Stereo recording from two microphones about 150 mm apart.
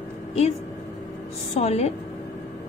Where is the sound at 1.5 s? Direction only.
45° left (ahead or behind).